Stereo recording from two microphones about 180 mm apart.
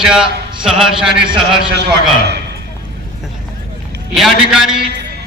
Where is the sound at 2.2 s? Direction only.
65° right (ahead or behind).